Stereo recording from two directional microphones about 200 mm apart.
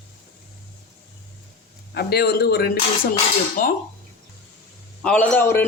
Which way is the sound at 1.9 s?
55° left (ahead or behind).